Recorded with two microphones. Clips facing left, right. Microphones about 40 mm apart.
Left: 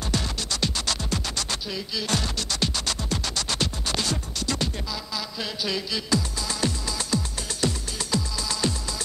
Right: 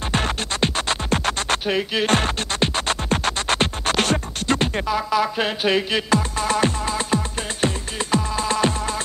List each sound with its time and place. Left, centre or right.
0.1 s music: right